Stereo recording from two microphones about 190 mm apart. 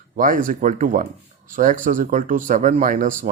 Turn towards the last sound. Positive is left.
turn(degrees=-45)  # may be behind; listen again after turning